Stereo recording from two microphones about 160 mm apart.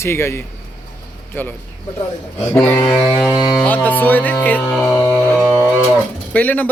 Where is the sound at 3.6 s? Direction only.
10° left (ahead or behind).